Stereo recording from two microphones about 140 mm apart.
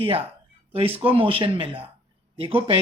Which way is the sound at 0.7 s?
45° right (ahead or behind).